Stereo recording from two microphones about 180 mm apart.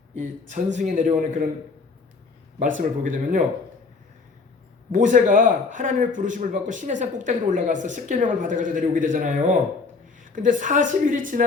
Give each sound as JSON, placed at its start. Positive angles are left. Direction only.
{"t": 0.2, "sound": "speech", "side_deg": -45}
{"t": 2.6, "sound": "speech", "side_deg": -45}
{"t": 4.9, "sound": "speech", "side_deg": -45}